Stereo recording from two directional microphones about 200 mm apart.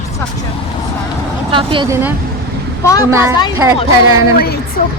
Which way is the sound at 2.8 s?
15° left (ahead or behind).